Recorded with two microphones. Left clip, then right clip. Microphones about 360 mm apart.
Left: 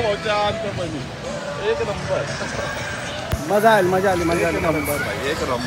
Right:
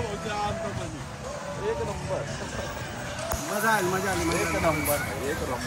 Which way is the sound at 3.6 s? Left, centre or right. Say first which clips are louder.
Left 9 dB; left.